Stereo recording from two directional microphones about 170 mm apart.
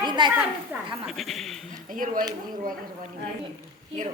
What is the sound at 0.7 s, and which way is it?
Speech, 10° right (ahead or behind).